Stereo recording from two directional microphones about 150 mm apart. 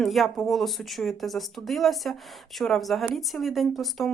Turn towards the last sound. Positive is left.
turn(degrees=0)  # may be behind; listen again after turning